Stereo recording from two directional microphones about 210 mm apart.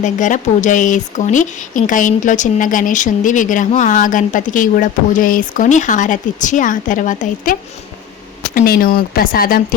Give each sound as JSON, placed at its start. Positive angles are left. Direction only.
{"t": 0.0, "sound": "speech", "side_deg": 35}
{"t": 8.5, "sound": "speech", "side_deg": 45}